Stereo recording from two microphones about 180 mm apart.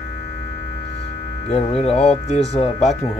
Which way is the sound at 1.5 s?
35° left (ahead or behind).